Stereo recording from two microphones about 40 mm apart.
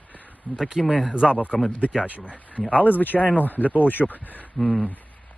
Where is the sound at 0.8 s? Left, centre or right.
Centre.